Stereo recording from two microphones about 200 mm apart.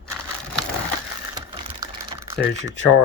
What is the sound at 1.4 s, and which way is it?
Typing, 20° right (ahead or behind).